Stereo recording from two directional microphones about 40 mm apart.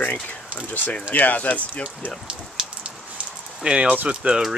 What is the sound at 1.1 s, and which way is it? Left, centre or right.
Speech, left.